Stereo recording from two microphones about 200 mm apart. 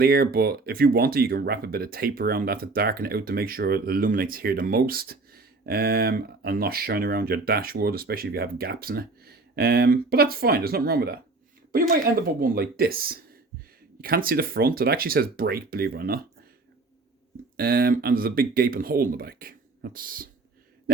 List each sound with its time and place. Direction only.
0.0 s speech: 50° right (ahead or behind)
17.6 s speech: 50° right (ahead or behind)